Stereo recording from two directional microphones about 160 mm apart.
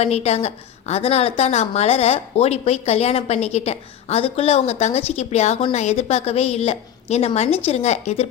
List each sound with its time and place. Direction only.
0.0 s a woman's voice: 40° left (ahead or behind)